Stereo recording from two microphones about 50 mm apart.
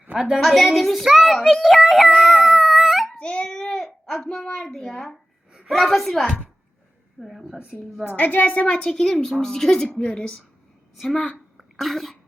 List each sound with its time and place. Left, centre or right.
0.3 s a woman's voice: centre
1.4 s a woman's voice: centre
1.6 s a woman's voice: centre
2.1 s dog: centre
3.2 s a sound: left
4.3 s a woman's voice: centre
8.0 s a woman's voice: left
8.6 s a woman's voice: centre
10.9 s a woman's voice: centre